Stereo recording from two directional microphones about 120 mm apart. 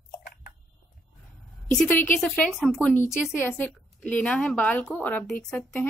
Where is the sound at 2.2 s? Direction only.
10° left (ahead or behind).